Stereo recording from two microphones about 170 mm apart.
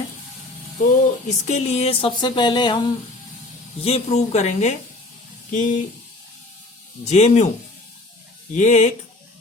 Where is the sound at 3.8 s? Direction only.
35° left (ahead or behind).